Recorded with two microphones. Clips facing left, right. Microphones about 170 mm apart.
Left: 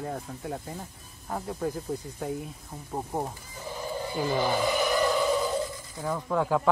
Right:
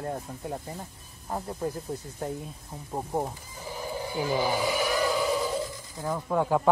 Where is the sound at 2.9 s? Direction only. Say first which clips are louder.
Right 2 dB; 5° right (ahead or behind).